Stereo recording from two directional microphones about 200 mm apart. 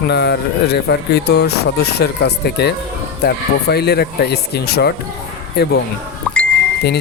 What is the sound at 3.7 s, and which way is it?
Speech, 55° left (ahead or behind).